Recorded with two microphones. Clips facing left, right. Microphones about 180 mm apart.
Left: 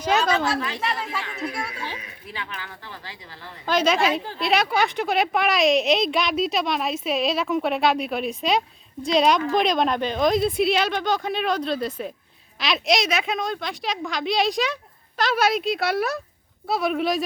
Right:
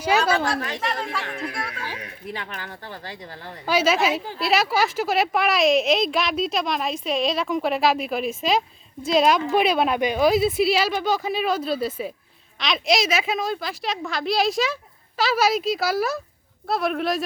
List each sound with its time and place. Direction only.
0.0 s speech: 10° right (ahead or behind); by 1.7 s 10° left (ahead or behind)
2.0 s speech: 50° right (ahead or behind)
3.7 s a woman's voice: 5° right (ahead or behind)